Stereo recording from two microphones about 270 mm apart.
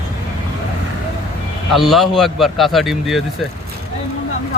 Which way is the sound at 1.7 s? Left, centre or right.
Centre.